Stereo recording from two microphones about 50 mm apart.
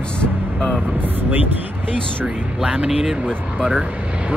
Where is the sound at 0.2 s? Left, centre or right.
Left.